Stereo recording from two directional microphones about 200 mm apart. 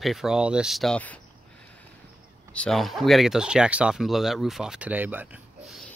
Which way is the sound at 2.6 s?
Centre (ahead or behind).